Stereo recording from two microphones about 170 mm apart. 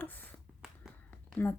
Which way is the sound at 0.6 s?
Centre (ahead or behind).